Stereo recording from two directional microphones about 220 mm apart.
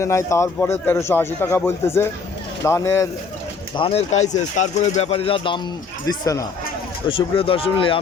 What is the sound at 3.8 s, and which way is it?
A man's voice, 25° left (ahead or behind).